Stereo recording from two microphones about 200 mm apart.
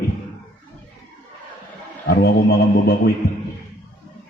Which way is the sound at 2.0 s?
50° left (ahead or behind).